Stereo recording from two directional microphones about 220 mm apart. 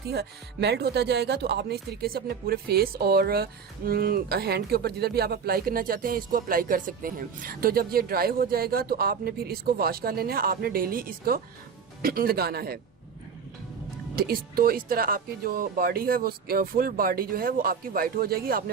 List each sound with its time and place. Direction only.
0.1 s speech: 50° right (ahead or behind)
14.2 s speech: 45° right (ahead or behind)